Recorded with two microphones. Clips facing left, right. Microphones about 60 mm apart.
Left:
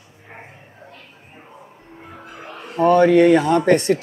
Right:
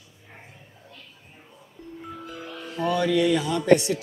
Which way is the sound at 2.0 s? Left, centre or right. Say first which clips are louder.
Even; left.